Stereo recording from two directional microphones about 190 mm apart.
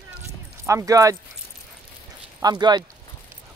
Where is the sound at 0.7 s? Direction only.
15° right (ahead or behind).